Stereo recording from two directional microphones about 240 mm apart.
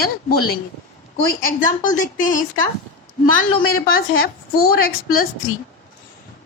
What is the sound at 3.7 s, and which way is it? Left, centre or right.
Speech, left.